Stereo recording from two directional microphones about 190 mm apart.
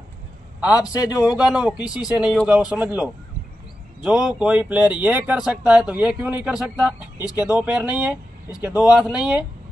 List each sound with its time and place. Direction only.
0.6 s a man's voice: 5° right (ahead or behind)
0.9 s speech: 20° left (ahead or behind)
1.2 s speech: 5° right (ahead or behind)